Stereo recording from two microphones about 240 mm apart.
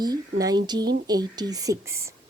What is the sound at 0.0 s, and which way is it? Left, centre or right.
A woman's voice, centre.